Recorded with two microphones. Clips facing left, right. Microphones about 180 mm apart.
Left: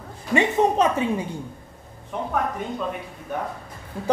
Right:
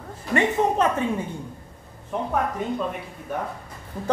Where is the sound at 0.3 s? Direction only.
10° left (ahead or behind).